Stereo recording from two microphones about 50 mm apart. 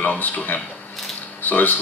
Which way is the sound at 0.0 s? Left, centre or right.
Left.